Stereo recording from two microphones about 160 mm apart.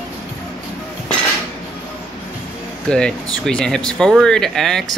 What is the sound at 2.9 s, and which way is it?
Speech, 5° left (ahead or behind).